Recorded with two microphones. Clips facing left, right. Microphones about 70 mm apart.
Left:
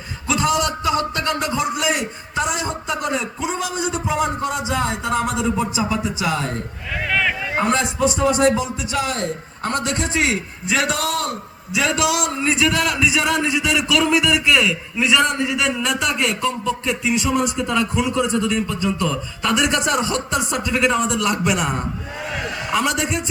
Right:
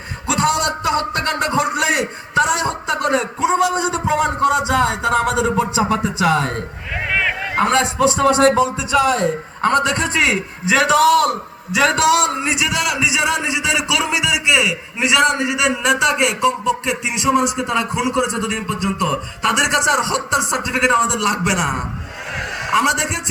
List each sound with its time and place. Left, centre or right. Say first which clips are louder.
0.3 s a man's voice: right 2 dB; right
7.1 s a sound: right 1 dB; centre
7.5 s speech: right 5 dB; right
9.6 s a man's voice: right 6 dB; right
10.8 s a man's voice: right 10 dB; right
12.4 s speech: left 1 dB; centre
15.5 s a sound: right 4 dB; centre